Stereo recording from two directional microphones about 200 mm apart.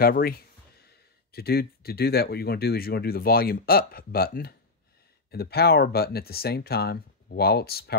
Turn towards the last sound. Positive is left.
turn(degrees=50)  # may be behind; listen again after turning